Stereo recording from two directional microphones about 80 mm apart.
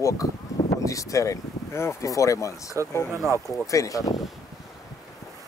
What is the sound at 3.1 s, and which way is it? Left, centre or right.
Speech, right.